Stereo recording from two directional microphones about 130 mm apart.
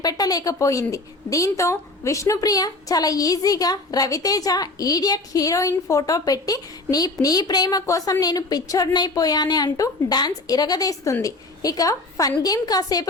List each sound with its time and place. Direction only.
0.0 s a woman's voice: 30° left (ahead or behind)